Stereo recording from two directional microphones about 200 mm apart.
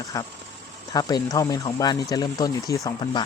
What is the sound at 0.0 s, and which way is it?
Speech, 15° left (ahead or behind).